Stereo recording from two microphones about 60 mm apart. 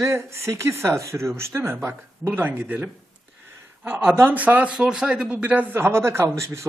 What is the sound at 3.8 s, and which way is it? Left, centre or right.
Speech, right.